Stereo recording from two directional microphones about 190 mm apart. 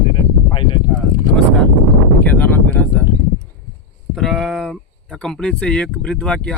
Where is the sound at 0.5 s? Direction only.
25° left (ahead or behind).